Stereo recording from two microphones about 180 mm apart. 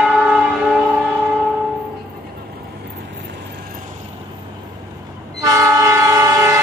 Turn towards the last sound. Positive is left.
turn(degrees=-20)  # may be behind; listen again after turning